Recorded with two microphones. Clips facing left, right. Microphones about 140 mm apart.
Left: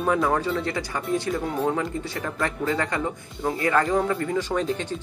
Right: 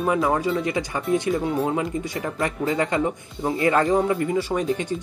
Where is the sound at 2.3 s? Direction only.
20° right (ahead or behind).